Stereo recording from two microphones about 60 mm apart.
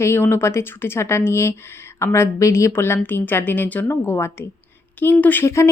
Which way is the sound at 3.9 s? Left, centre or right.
Left.